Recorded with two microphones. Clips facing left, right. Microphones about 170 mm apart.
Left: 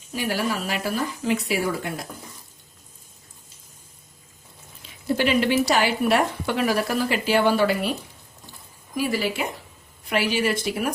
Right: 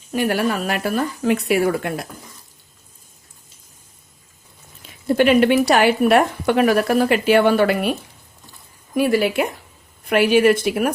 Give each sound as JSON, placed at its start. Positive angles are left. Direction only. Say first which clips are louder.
{"t": 0.1, "sound": "a woman's voice", "louder": "right 6 dB", "side_deg": -60}
{"t": 5.0, "sound": "a woman's voice", "louder": "right 7 dB", "side_deg": -55}
{"t": 9.0, "sound": "a woman's voice", "louder": "right 7 dB", "side_deg": -60}